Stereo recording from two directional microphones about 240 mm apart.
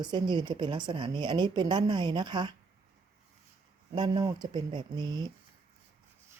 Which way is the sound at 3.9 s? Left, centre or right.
Centre.